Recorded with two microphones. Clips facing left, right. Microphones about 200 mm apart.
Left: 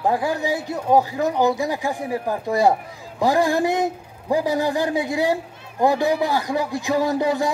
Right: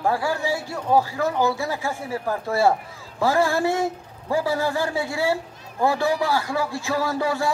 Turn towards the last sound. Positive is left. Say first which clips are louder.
# left 3 dB
turn(degrees=20)  # may be behind; listen again after turning